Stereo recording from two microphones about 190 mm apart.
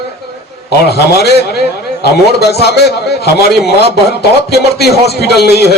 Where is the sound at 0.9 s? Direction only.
60° left (ahead or behind).